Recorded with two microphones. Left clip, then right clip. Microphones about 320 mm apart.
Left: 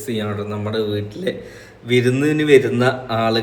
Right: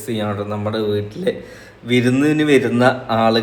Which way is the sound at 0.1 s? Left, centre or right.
Centre.